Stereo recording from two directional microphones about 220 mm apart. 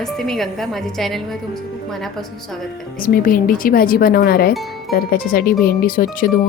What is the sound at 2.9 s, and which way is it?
A woman's voice, 40° left (ahead or behind).